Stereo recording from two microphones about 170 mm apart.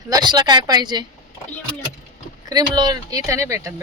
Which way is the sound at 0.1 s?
25° right (ahead or behind).